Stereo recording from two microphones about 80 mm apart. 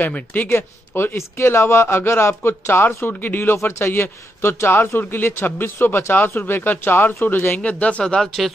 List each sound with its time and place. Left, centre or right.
0.0 s speech: left; by 8.5 s centre